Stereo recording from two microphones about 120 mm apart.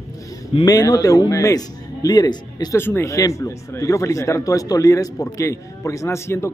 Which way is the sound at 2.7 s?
20° left (ahead or behind).